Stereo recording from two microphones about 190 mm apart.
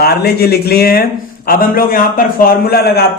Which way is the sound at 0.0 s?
55° left (ahead or behind).